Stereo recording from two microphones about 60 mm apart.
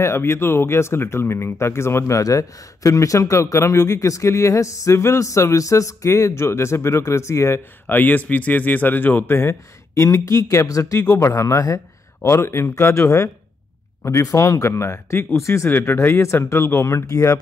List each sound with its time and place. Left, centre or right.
0.0 s speech: left
7.8 s speech: left
10.0 s speech: left
12.2 s speech: left
14.3 s speech: left
15.8 s speech: left
16.1 s speech: left